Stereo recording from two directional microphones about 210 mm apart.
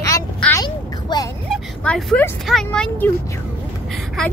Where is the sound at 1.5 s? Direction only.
5° left (ahead or behind).